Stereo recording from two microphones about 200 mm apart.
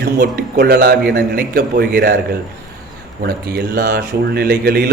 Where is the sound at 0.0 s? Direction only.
50° right (ahead or behind).